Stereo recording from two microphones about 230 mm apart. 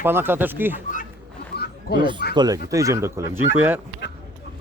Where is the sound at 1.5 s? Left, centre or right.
Left.